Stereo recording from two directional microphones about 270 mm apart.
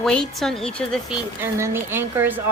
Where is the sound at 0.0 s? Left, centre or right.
Centre.